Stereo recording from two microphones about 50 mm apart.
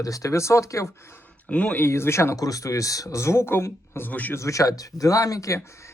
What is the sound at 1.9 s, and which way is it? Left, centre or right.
Speech, left.